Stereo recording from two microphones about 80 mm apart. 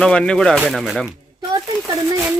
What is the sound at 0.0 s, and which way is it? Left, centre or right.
A woman's voice, centre.